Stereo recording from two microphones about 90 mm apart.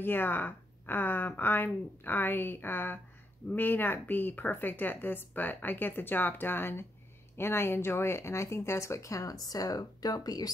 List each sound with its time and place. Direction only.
0.0 s speech: 25° left (ahead or behind); by 10.5 s 45° left (ahead or behind)